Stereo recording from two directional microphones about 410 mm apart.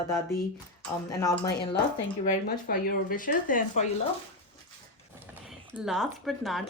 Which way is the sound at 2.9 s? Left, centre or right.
Centre.